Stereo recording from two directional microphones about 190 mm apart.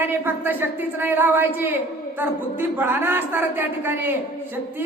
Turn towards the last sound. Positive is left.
turn(degrees=-10)  # may be behind; listen again after turning